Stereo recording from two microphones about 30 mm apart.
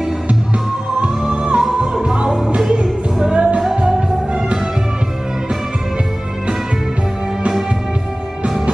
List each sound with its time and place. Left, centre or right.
1.3 s music: right